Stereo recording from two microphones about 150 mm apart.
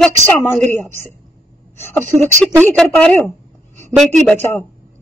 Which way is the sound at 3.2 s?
15° left (ahead or behind).